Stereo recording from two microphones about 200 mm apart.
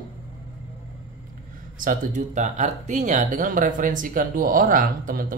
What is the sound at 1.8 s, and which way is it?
Speech, 40° right (ahead or behind).